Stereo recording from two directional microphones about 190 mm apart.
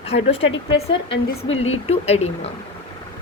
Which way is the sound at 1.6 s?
35° left (ahead or behind).